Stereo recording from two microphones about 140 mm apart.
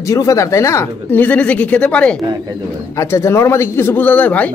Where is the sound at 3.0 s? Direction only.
20° left (ahead or behind).